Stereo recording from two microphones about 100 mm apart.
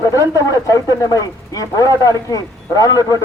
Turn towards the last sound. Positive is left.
turn(degrees=35)  # may be behind; listen again after turning